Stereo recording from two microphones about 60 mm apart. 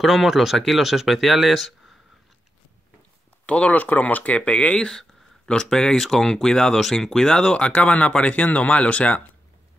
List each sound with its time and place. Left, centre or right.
0.0 s speech: centre
3.4 s speech: left